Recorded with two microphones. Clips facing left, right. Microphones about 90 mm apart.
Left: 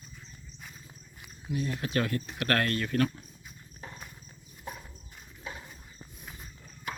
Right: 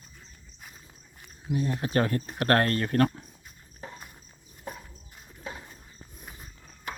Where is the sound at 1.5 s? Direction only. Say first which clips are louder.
Right 4 dB; 30° right (ahead or behind).